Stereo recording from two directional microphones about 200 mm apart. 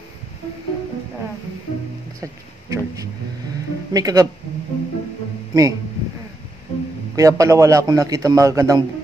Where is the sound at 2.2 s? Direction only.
15° right (ahead or behind).